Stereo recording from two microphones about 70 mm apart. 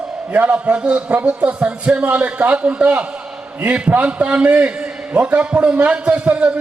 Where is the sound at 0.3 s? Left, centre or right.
Centre.